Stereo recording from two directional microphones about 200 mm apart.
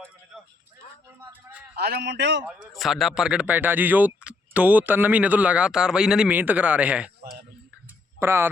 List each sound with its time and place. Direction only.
1.2 s a sound: 10° right (ahead or behind)
1.7 s a man's voice: 55° right (ahead or behind)
2.5 s speech: centre (ahead or behind)
8.2 s speech: 10° right (ahead or behind)